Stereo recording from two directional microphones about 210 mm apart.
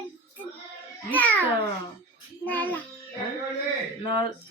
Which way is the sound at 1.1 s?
10° left (ahead or behind).